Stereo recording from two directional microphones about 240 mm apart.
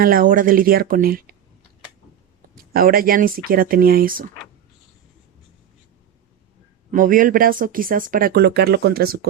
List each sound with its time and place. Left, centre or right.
0.0 s speech: right
2.7 s speech: right
6.9 s speech: right